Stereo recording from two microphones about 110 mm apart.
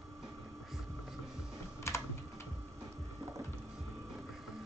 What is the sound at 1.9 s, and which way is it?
Typing, 25° left (ahead or behind).